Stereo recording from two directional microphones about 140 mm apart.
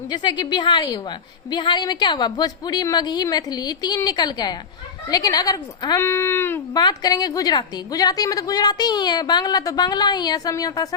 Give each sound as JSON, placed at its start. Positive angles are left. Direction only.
{"t": 0.1, "sound": "a woman's voice", "side_deg": 30}
{"t": 6.7, "sound": "a woman's voice", "side_deg": 30}